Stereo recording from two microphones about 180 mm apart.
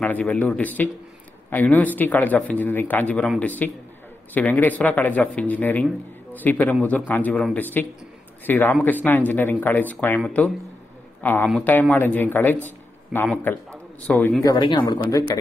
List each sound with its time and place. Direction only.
0.0 s a man's voice: 10° left (ahead or behind)
14.4 s speech: 25° left (ahead or behind)